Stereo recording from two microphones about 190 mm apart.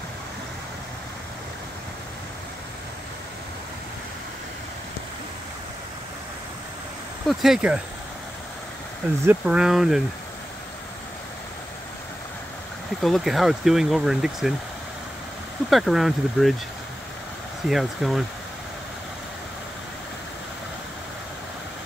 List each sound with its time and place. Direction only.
7.2 s speech: centre (ahead or behind)
9.2 s speech: 5° right (ahead or behind)
13.0 s speech: centre (ahead or behind)
15.7 s speech: centre (ahead or behind)
17.6 s speech: centre (ahead or behind)